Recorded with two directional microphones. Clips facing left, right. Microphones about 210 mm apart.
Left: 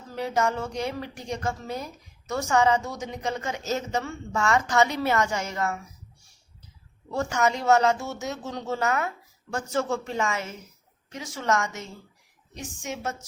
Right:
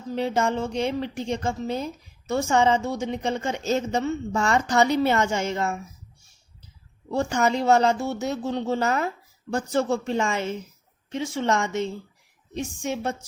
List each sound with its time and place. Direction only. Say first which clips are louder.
0.1 s a woman's voice: right 2 dB; 25° right (ahead or behind)
7.1 s a woman's voice: right 2 dB; 30° right (ahead or behind)